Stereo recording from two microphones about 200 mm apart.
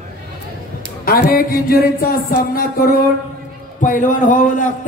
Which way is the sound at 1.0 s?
45° left (ahead or behind).